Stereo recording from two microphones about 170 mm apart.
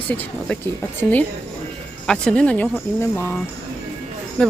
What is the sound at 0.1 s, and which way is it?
Speech, 10° left (ahead or behind).